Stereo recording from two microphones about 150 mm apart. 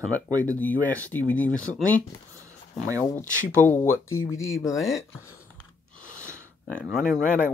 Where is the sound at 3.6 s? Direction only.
15° left (ahead or behind).